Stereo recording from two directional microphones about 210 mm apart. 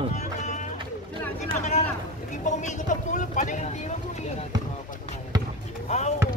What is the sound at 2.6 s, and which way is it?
Vehicle, 35° left (ahead or behind).